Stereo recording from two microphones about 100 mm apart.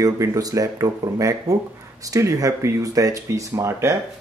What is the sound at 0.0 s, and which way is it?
Speech, 35° right (ahead or behind).